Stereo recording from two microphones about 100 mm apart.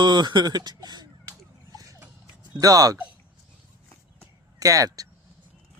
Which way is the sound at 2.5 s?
35° right (ahead or behind).